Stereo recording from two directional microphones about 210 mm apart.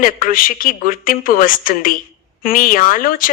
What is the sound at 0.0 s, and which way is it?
Speech, 40° left (ahead or behind).